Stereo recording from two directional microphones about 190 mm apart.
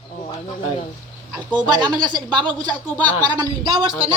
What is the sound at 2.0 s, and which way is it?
Speech, 25° right (ahead or behind).